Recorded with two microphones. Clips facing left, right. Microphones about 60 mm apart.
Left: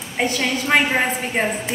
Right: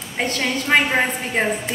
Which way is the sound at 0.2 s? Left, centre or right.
Centre.